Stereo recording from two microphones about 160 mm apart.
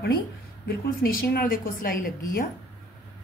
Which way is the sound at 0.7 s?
70° left (ahead or behind).